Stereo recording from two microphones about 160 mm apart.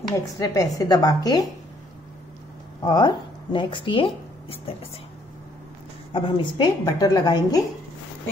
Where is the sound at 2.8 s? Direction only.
25° left (ahead or behind).